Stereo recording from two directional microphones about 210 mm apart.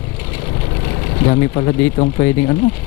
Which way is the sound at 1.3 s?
20° left (ahead or behind).